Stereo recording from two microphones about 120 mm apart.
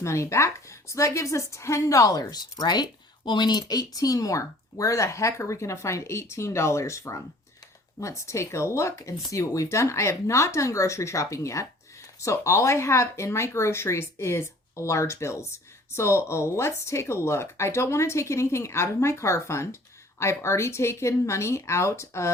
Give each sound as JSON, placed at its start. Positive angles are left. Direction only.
{"t": 0.0, "sound": "speech", "side_deg": 25}